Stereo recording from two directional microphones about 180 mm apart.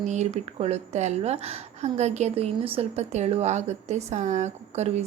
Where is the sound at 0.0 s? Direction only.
40° right (ahead or behind).